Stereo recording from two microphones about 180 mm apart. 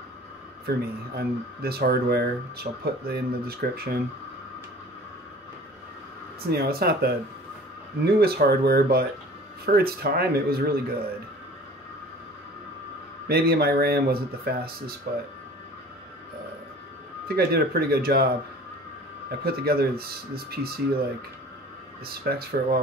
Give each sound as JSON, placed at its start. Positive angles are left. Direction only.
{"t": 0.7, "sound": "speech", "side_deg": -60}
{"t": 6.4, "sound": "speech", "side_deg": -60}
{"t": 13.3, "sound": "speech", "side_deg": -60}
{"t": 17.3, "sound": "speech", "side_deg": -60}
{"t": 19.4, "sound": "speech", "side_deg": -60}
{"t": 22.0, "sound": "speech", "side_deg": -60}